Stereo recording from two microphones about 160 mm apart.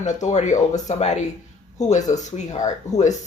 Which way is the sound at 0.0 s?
50° left (ahead or behind).